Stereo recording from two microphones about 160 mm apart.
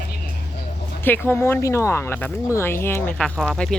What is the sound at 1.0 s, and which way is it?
Speech, 10° left (ahead or behind).